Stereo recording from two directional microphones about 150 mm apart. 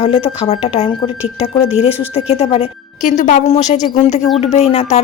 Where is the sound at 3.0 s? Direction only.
60° left (ahead or behind).